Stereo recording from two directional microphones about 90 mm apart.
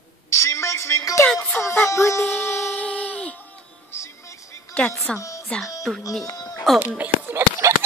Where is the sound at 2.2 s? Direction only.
20° left (ahead or behind).